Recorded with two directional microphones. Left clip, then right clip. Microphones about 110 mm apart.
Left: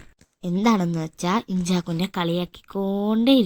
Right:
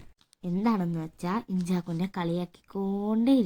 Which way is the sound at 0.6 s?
30° left (ahead or behind).